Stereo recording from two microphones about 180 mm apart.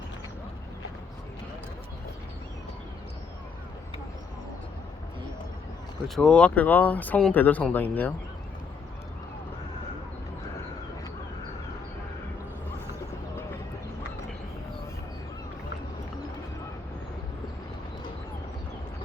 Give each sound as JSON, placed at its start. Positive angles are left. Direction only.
{"t": 6.1, "sound": "speech", "side_deg": 5}